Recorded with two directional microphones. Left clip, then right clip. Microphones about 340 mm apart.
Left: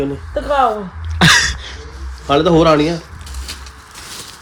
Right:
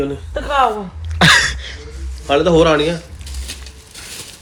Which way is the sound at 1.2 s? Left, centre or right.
Centre.